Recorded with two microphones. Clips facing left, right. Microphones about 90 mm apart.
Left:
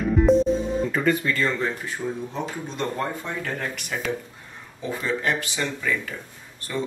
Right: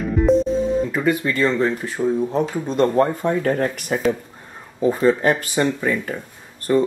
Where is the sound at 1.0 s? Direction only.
15° right (ahead or behind).